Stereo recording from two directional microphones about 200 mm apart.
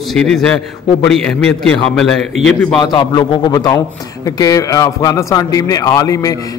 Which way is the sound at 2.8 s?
20° left (ahead or behind).